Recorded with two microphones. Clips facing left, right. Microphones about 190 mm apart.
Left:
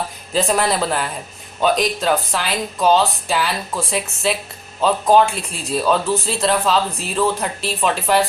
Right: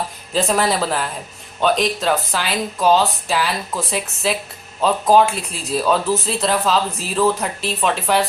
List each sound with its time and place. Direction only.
0.3 s speech: centre (ahead or behind)